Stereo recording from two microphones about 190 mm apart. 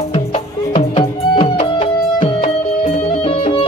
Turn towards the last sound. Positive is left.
turn(degrees=30)  # may be behind; listen again after turning